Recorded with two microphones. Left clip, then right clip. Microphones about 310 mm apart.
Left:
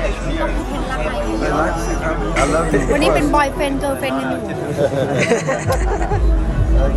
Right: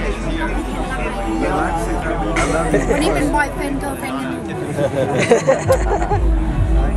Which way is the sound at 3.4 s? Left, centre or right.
Centre.